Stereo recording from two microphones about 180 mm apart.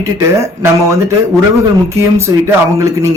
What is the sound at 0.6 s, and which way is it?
Speech, 15° right (ahead or behind).